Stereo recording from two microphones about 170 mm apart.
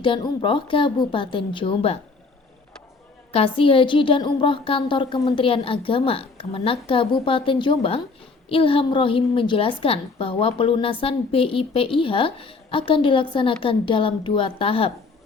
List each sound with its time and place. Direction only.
0.0 s a woman's voice: 30° left (ahead or behind)
3.3 s a woman's voice: 30° left (ahead or behind)